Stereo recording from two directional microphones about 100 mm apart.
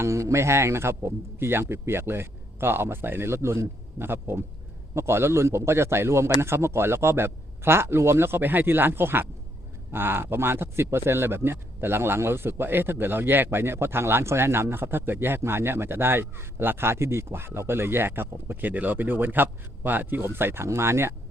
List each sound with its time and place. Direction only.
0.0 s speech: 30° right (ahead or behind)